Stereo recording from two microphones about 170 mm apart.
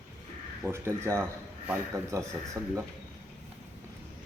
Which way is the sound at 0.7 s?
15° right (ahead or behind).